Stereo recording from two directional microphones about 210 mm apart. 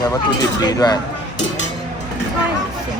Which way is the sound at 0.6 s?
20° left (ahead or behind).